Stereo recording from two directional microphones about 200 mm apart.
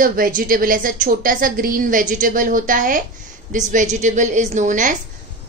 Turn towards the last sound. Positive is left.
turn(degrees=-40)  # may be behind; listen again after turning